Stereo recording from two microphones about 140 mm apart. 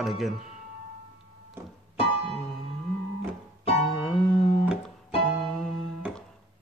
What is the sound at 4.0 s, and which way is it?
Music, 5° left (ahead or behind).